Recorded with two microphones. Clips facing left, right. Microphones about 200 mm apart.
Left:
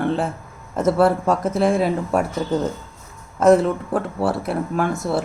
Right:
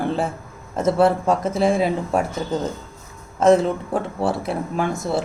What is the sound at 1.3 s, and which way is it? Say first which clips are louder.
Speech: even; centre (ahead or behind).